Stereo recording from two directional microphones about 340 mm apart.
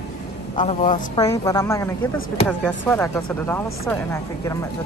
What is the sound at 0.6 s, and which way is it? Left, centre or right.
Speech, left.